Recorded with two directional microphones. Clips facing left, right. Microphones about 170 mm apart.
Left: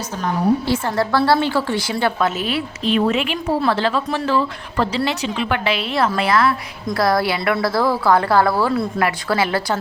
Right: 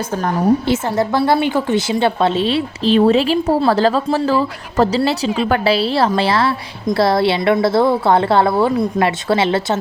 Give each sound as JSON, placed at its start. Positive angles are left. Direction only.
{"t": 0.3, "sound": "a woman's voice", "side_deg": -45}
{"t": 0.7, "sound": "a woman's voice", "side_deg": -20}